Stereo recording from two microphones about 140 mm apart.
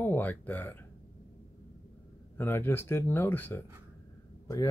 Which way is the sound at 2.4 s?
15° left (ahead or behind).